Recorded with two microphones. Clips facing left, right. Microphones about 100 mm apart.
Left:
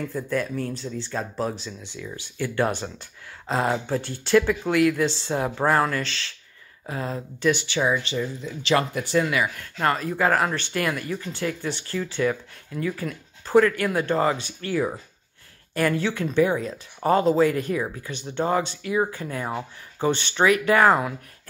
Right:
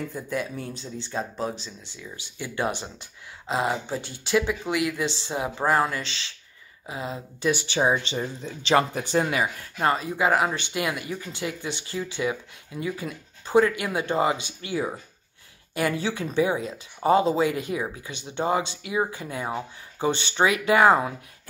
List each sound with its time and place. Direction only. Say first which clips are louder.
0.1 s speech: left 4 dB; 10° right (ahead or behind); by 1.7 s 5° left (ahead or behind)
2.3 s speech: left 4 dB; 10° right (ahead or behind)
7.4 s speech: left 1 dB; 20° right (ahead or behind)
9.8 s speech: left 1 dB; 15° right (ahead or behind)